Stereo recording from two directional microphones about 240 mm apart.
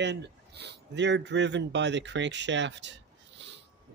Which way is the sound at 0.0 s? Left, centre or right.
Right.